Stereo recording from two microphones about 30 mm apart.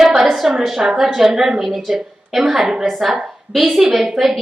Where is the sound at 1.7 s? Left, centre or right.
Centre.